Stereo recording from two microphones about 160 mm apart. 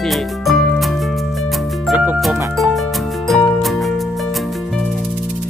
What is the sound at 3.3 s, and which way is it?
Music, centre (ahead or behind).